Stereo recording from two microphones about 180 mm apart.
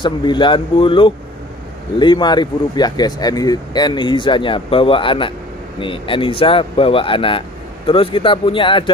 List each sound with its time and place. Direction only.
0.0 s speech: 25° left (ahead or behind)